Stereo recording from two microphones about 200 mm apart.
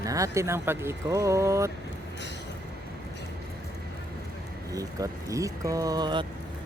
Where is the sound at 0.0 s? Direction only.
15° right (ahead or behind).